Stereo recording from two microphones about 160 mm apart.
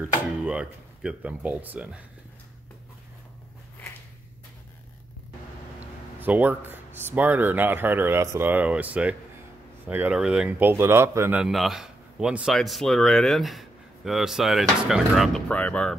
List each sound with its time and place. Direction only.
0.5 s speech: 5° right (ahead or behind)
6.2 s a man's voice: 10° right (ahead or behind); by 15.9 s 10° left (ahead or behind)